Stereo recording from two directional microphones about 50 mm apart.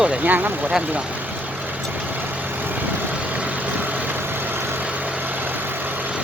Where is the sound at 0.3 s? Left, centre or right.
Right.